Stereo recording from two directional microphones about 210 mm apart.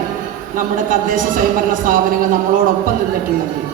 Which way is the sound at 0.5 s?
40° right (ahead or behind).